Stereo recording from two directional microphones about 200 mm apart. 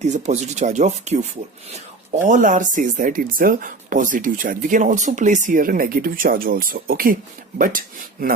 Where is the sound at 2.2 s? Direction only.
40° right (ahead or behind).